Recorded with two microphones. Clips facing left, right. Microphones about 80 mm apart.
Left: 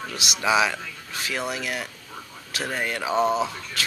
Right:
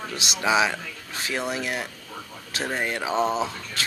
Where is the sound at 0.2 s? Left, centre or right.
Right.